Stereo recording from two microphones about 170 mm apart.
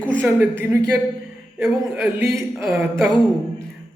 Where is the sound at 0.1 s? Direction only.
10° right (ahead or behind).